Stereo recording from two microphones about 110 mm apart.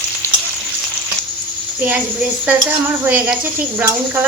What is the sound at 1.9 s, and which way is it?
A woman's voice, 15° right (ahead or behind).